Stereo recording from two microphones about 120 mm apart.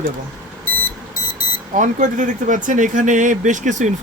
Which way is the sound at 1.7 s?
90° right.